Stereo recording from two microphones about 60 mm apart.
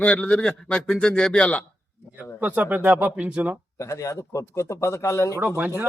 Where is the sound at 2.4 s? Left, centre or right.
Right.